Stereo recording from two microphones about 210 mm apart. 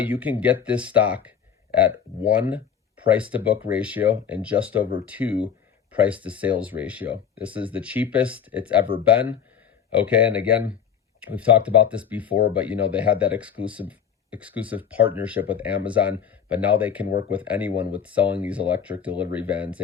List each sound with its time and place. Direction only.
0.0 s speech: 5° right (ahead or behind)
17.1 s speech: 45° left (ahead or behind)
17.3 s speech: 5° right (ahead or behind)